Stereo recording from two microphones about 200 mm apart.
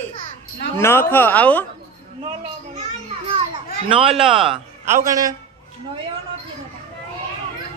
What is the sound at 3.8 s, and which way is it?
A man's voice, 25° right (ahead or behind).